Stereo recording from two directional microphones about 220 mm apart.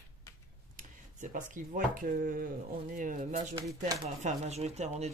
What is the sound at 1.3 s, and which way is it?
Speech, 40° right (ahead or behind).